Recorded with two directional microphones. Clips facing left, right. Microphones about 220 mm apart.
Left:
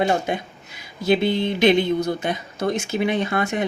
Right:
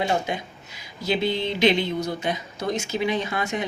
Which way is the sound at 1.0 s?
55° left (ahead or behind).